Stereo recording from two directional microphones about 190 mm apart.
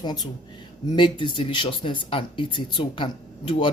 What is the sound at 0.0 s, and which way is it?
Speech, 20° left (ahead or behind).